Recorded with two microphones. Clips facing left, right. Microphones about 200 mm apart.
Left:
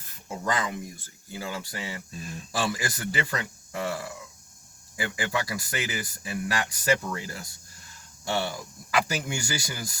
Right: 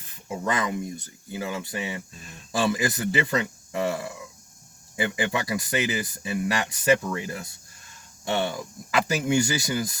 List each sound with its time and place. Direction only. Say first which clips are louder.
0.4 s speech: right 3 dB; 25° right (ahead or behind)